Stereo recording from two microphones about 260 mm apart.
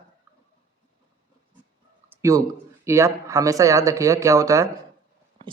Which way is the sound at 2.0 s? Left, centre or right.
Centre.